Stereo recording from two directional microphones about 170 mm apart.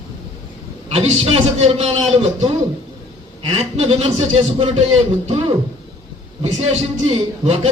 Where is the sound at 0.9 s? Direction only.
35° right (ahead or behind).